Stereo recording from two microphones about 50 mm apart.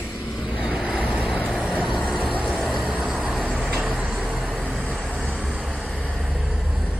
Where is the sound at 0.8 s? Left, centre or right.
Right.